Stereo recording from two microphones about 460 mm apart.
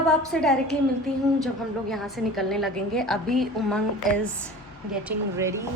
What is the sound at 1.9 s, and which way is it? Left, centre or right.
A woman's voice, centre.